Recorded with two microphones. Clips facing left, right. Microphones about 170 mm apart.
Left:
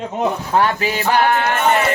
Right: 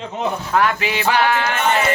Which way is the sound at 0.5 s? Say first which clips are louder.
Even; 35° left (ahead or behind).